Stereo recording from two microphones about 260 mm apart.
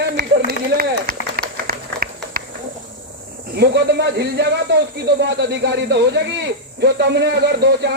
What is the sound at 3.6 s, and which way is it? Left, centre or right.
A man's voice, right.